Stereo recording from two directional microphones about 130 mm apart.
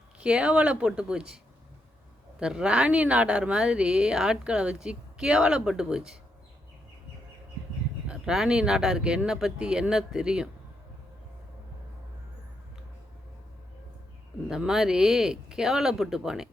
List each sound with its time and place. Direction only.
0.2 s speech: 5° right (ahead or behind)
2.4 s speech: 5° right (ahead or behind)
8.0 s speech: 5° right (ahead or behind)
14.4 s speech: 5° right (ahead or behind)